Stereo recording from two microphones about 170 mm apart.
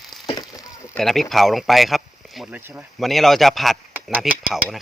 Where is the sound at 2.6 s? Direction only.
10° right (ahead or behind).